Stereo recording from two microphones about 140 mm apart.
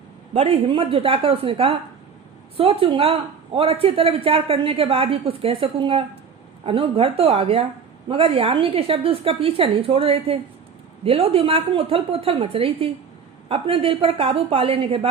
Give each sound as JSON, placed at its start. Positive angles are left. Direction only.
{"t": 0.3, "sound": "a woman's voice", "side_deg": -40}